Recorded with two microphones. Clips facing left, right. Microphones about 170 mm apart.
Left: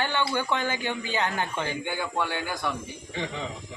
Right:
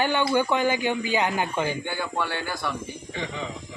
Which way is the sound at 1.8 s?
15° left (ahead or behind).